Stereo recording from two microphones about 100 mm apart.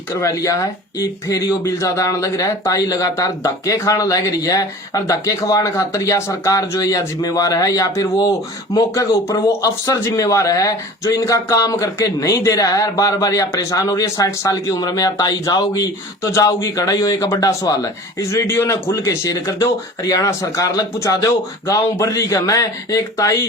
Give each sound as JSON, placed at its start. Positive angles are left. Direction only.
{"t": 0.2, "sound": "speech", "side_deg": 30}